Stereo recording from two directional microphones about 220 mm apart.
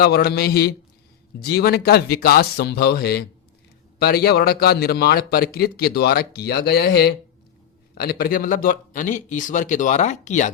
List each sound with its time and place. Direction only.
0.0 s a man's voice: 45° left (ahead or behind)